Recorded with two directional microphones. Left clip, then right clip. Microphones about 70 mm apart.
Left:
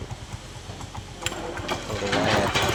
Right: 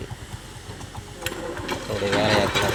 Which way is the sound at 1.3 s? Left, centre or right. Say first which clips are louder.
Even; centre.